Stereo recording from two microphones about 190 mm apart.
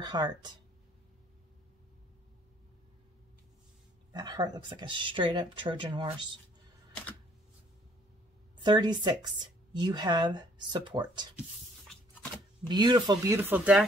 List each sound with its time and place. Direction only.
0.0 s speech: 20° right (ahead or behind)
4.1 s speech: 25° right (ahead or behind)
8.6 s speech: 25° right (ahead or behind)
12.6 s speech: 25° right (ahead or behind)